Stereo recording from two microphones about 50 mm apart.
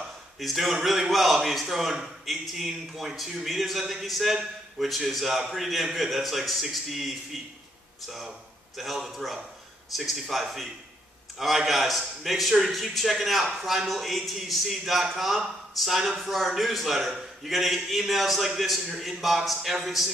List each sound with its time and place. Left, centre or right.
0.4 s a man's voice: centre
8.7 s a man's voice: centre